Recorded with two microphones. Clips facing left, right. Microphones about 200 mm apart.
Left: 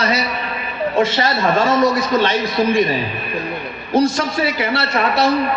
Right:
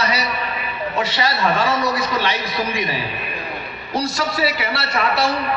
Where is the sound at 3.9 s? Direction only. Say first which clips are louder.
Left 6 dB; 50° left (ahead or behind).